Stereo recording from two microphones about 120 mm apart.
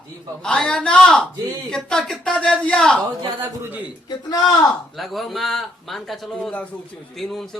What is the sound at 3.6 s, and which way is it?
Speech, 15° right (ahead or behind).